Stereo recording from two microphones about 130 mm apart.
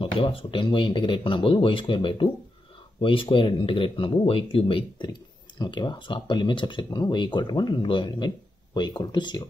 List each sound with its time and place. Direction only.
0.0 s speech: 45° left (ahead or behind)